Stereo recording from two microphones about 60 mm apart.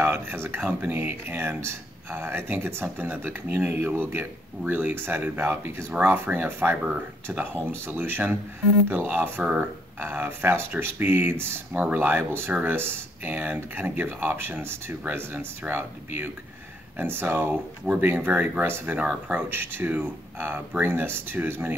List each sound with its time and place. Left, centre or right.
0.0 s speech: right